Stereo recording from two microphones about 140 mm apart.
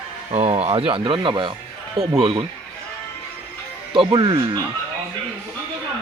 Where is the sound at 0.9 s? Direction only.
35° right (ahead or behind).